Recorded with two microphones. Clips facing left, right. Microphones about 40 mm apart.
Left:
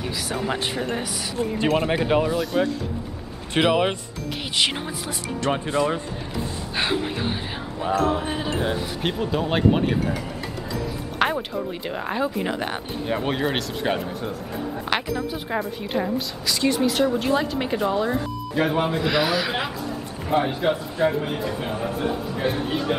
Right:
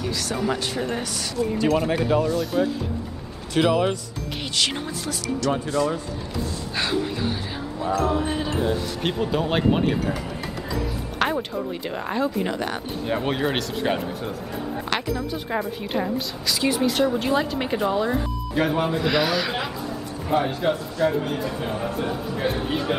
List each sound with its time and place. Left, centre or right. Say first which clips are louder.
0.0 s speech: right 1 dB; centre
0.7 s speech: even; centre
1.6 s speech: left 1 dB; left
4.6 s speech: left 2 dB; centre
5.4 s speech: left 1 dB; left
8.0 s speech: right 1 dB; centre
9.0 s a woman's voice: right 1 dB; centre
11.1 s speech: left 1 dB; centre
13.1 s a woman's voice: even; centre
14.9 s music: left 2 dB; centre
15.5 s a woman's voice: even; centre